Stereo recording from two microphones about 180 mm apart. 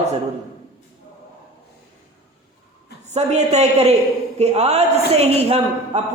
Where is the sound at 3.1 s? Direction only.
40° right (ahead or behind).